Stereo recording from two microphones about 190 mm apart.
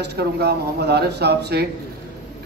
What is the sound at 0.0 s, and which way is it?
Speech, 60° right (ahead or behind).